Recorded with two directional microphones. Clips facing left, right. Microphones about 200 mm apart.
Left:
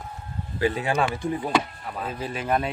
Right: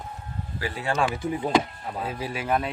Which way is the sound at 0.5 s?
20° left (ahead or behind).